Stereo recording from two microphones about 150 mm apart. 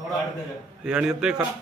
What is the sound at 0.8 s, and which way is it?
Speech, 5° right (ahead or behind).